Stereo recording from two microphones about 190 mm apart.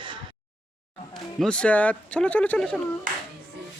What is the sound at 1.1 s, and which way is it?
Speech, 5° left (ahead or behind).